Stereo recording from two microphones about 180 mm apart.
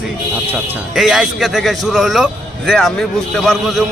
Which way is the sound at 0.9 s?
Centre (ahead or behind).